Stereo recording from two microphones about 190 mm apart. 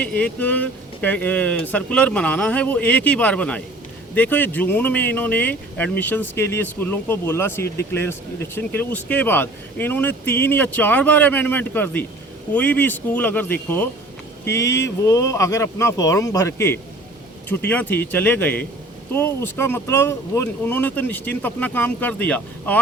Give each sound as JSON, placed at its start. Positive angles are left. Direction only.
{"t": 0.2, "sound": "speech", "side_deg": 10}